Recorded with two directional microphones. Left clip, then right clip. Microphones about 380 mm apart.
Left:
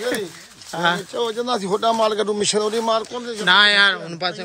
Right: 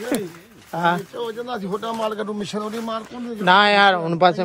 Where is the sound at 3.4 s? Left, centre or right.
Centre.